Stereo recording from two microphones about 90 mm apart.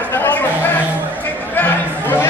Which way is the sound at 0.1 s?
20° left (ahead or behind).